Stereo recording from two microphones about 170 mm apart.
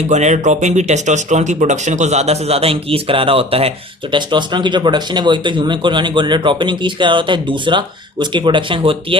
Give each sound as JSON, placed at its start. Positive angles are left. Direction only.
{"t": 0.1, "sound": "speech", "side_deg": -45}